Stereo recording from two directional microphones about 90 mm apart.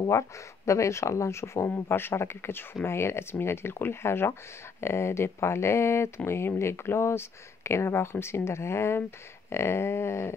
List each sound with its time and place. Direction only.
0.7 s speech: 35° left (ahead or behind)